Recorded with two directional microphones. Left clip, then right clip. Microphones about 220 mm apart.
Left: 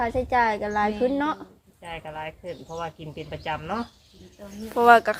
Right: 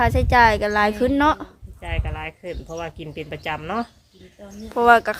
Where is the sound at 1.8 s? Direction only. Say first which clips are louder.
Right 3 dB; 55° right (ahead or behind).